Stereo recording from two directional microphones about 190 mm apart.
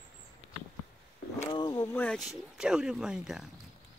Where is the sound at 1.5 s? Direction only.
20° left (ahead or behind).